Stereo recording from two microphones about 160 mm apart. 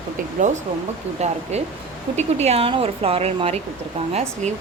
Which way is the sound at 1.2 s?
45° right (ahead or behind).